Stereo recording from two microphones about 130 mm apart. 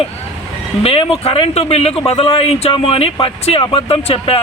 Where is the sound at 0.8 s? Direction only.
50° left (ahead or behind).